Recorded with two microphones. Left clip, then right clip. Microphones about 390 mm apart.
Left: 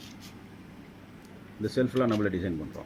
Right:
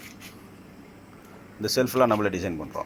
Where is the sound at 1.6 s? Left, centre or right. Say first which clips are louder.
Right 6 dB; right.